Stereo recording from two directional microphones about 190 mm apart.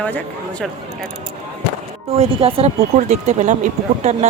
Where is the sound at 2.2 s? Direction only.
30° right (ahead or behind).